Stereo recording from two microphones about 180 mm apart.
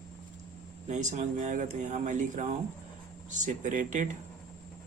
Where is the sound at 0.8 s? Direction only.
40° right (ahead or behind).